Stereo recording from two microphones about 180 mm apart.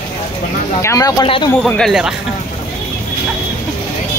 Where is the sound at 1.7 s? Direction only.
Centre (ahead or behind).